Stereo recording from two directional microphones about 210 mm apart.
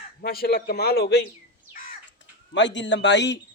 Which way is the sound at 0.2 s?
45° left (ahead or behind).